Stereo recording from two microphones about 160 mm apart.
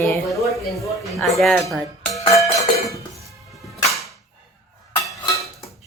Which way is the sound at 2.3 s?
20° left (ahead or behind).